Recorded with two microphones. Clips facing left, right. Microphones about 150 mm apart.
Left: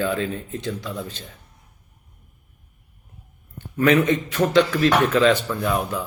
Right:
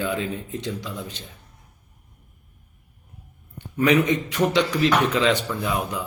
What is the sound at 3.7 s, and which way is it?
Speech, 15° right (ahead or behind).